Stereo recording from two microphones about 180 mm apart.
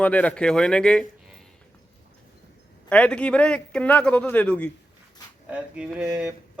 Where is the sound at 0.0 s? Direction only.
5° left (ahead or behind).